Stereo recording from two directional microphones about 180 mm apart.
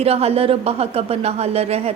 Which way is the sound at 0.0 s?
35° right (ahead or behind).